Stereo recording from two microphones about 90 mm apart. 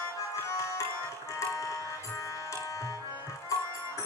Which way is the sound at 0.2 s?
35° left (ahead or behind).